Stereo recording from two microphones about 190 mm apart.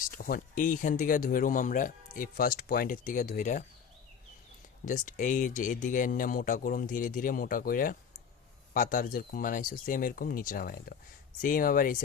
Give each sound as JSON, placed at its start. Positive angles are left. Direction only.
{"t": 0.0, "sound": "speech", "side_deg": 50}
{"t": 4.9, "sound": "speech", "side_deg": 40}